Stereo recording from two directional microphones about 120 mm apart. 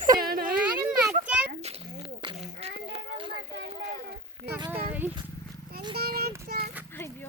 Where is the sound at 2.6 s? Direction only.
50° right (ahead or behind).